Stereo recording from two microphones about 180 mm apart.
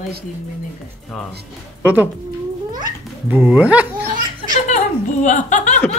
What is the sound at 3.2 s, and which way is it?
Speech, 10° right (ahead or behind).